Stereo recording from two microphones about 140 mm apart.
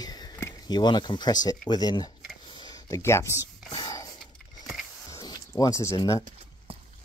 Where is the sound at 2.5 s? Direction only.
30° left (ahead or behind).